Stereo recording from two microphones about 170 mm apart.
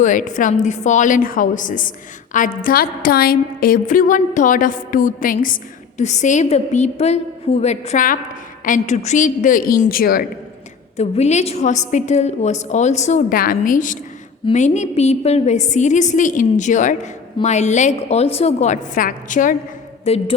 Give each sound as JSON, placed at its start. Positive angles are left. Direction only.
{"t": 0.0, "sound": "a woman's voice", "side_deg": 50}
{"t": 10.9, "sound": "a woman's voice", "side_deg": 40}
{"t": 20.1, "sound": "a sound", "side_deg": 35}